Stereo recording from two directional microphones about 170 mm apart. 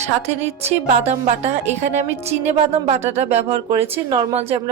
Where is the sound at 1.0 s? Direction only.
40° right (ahead or behind).